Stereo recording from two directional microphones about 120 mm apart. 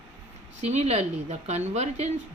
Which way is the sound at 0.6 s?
65° right (ahead or behind).